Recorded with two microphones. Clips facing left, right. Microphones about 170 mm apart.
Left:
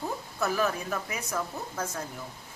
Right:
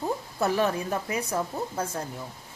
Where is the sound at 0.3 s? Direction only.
30° right (ahead or behind).